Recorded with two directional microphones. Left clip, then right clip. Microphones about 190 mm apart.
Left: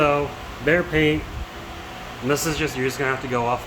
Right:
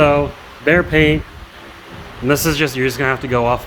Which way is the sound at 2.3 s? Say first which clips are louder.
Right 7 dB; 50° right (ahead or behind).